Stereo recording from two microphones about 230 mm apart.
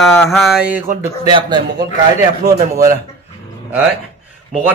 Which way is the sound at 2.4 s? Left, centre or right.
Right.